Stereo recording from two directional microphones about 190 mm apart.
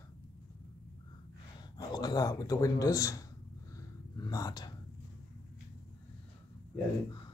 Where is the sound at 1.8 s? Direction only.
20° left (ahead or behind).